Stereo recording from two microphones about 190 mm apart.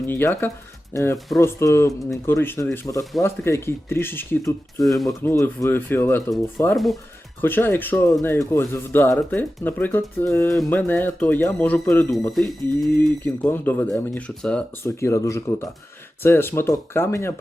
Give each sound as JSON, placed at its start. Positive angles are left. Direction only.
{"t": 0.1, "sound": "speech", "side_deg": 10}
{"t": 4.9, "sound": "speech", "side_deg": 0}
{"t": 5.2, "sound": "speech", "side_deg": 15}